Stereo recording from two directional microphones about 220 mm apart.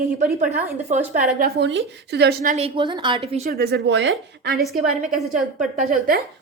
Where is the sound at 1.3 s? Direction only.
45° right (ahead or behind).